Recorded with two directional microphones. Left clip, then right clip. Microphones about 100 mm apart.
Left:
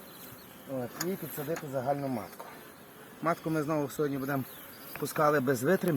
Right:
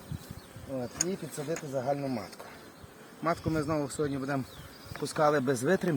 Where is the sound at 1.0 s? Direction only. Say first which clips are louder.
Right 1 dB; 35° right (ahead or behind).